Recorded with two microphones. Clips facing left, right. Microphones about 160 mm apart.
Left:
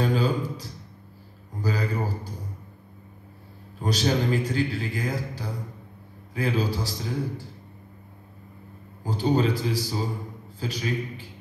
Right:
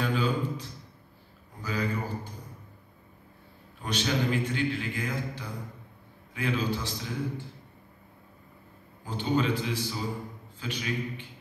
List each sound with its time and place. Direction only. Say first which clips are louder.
0.0 s a sound: left 4 dB; 35° left (ahead or behind)
3.8 s a man's voice: left 4 dB; 35° left (ahead or behind)
9.0 s a man's voice: left 4 dB; 35° left (ahead or behind)